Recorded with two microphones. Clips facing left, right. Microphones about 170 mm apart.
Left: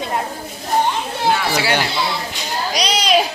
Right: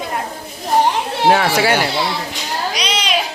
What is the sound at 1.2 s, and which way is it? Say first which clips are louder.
Speech: right 6 dB; 75° right (ahead or behind).